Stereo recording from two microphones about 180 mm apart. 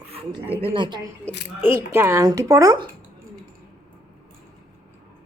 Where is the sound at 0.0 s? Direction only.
35° right (ahead or behind).